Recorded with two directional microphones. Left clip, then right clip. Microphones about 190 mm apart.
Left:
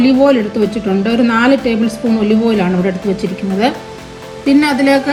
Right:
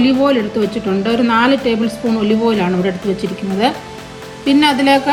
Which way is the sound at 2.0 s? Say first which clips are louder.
Left 2 dB; centre (ahead or behind).